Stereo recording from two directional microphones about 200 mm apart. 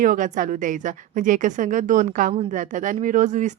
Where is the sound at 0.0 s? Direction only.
40° right (ahead or behind).